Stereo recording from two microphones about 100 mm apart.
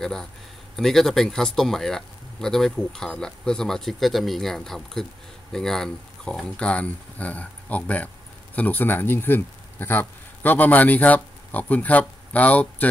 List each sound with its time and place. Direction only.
0.0 s a man's voice: 5° left (ahead or behind)